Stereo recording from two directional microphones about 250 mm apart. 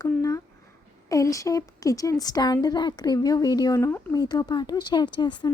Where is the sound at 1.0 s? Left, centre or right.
Centre.